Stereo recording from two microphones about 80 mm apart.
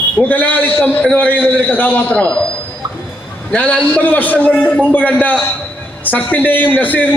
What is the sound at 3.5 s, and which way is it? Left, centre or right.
A man's voice, centre.